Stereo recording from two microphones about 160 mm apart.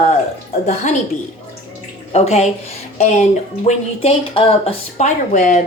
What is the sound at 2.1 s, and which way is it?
Speech, 40° left (ahead or behind).